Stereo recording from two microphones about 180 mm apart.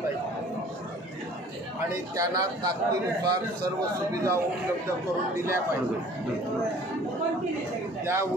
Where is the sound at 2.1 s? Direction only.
20° right (ahead or behind).